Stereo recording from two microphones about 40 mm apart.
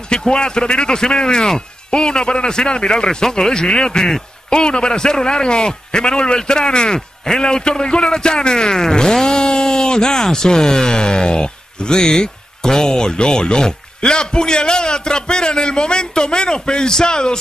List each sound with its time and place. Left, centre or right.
0.1 s a man's voice: left